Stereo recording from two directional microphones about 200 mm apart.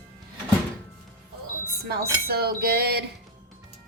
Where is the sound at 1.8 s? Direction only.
50° right (ahead or behind).